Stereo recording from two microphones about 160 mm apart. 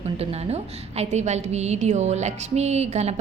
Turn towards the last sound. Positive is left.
turn(degrees=-45)  # may be behind; listen again after turning